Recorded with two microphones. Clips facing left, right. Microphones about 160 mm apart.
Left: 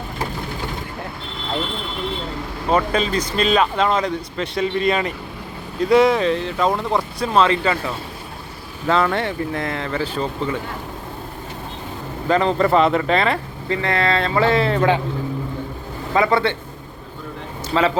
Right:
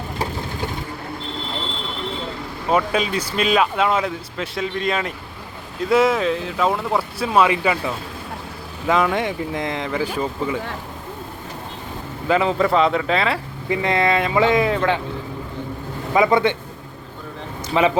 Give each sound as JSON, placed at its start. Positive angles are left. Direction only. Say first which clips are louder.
{"t": 2.6, "sound": "speech", "louder": "left 1 dB", "side_deg": -10}
{"t": 8.9, "sound": "speech", "louder": "even", "side_deg": -10}
{"t": 12.3, "sound": "speech", "louder": "left 1 dB", "side_deg": -5}
{"t": 13.7, "sound": "speech", "louder": "right 1 dB", "side_deg": -20}
{"t": 16.1, "sound": "speech", "louder": "right 1 dB", "side_deg": -15}
{"t": 17.7, "sound": "speech", "louder": "right 1 dB", "side_deg": -10}